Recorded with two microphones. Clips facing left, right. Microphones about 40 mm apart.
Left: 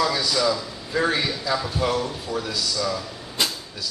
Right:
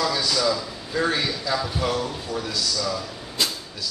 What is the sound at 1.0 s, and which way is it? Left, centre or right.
A man's voice, centre.